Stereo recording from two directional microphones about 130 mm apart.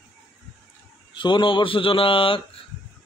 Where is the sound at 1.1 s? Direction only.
40° left (ahead or behind).